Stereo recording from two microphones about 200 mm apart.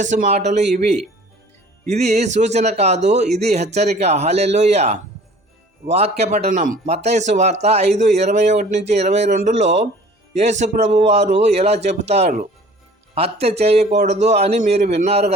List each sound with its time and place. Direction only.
0.0 s a man's voice: 40° right (ahead or behind)